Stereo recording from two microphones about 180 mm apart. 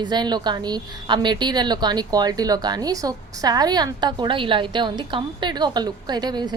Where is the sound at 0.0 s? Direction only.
25° right (ahead or behind).